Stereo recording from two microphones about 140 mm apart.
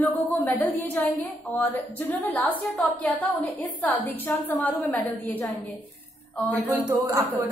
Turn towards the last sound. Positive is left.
turn(degrees=-15)  # may be behind; listen again after turning